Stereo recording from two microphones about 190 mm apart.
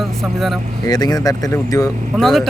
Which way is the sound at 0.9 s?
20° left (ahead or behind).